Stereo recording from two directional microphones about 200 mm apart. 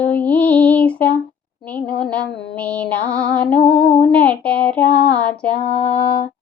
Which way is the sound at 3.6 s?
25° left (ahead or behind).